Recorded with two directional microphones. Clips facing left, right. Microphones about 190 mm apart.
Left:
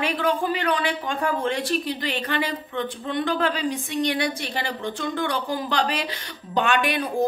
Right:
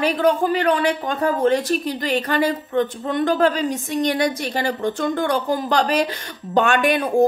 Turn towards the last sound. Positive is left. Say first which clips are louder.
# right 5 dB
turn(degrees=-45)  # may be behind; listen again after turning